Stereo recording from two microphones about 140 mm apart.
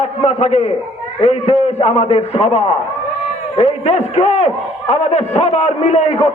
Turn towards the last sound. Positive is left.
turn(degrees=50)  # may be behind; listen again after turning